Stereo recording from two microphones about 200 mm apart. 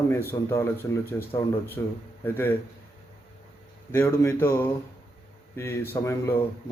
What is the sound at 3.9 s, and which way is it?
A man's voice, 10° left (ahead or behind).